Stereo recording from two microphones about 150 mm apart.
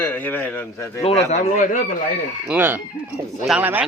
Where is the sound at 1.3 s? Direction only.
50° left (ahead or behind).